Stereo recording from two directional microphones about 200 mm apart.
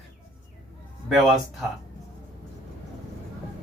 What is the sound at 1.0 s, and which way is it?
Speech, centre (ahead or behind).